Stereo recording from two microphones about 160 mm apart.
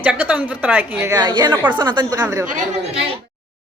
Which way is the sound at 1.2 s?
25° right (ahead or behind).